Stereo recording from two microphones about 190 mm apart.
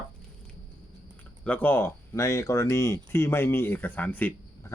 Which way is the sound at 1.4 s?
10° left (ahead or behind).